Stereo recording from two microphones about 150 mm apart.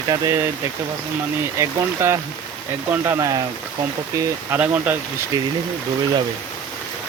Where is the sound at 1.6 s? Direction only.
20° right (ahead or behind).